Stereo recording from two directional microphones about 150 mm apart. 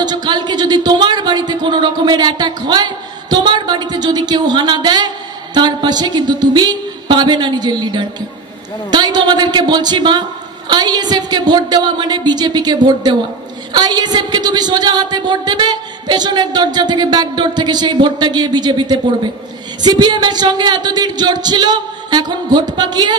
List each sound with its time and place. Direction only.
0.0 s speech: 30° right (ahead or behind)